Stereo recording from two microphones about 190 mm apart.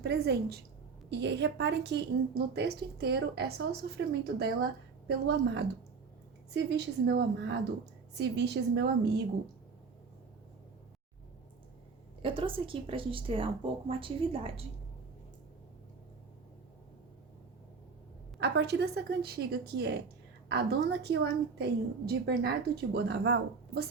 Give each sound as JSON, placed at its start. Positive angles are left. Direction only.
{"t": 0.0, "sound": "a woman's voice", "side_deg": -55}
{"t": 12.2, "sound": "a woman's voice", "side_deg": -30}
{"t": 18.3, "sound": "a woman's voice", "side_deg": -60}